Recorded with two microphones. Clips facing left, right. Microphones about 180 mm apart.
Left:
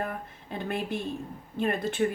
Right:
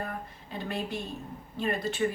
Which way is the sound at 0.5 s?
50° left (ahead or behind).